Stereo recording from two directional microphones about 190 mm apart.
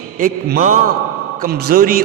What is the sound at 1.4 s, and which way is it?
Speech, 55° right (ahead or behind).